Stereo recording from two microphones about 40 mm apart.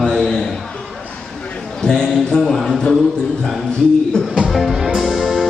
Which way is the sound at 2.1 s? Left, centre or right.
Centre.